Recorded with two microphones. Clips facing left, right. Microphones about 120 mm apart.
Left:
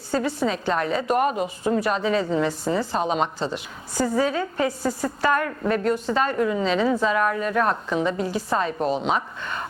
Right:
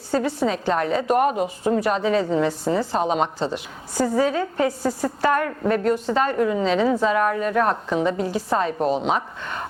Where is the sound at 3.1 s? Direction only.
55° right (ahead or behind).